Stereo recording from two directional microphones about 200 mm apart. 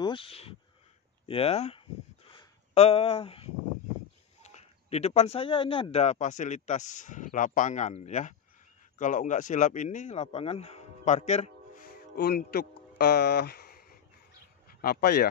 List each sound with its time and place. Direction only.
0.0 s speech: 25° left (ahead or behind)
2.3 s a sound: 30° left (ahead or behind)
4.4 s speech: 35° left (ahead or behind); by 15.2 s 50° left (ahead or behind)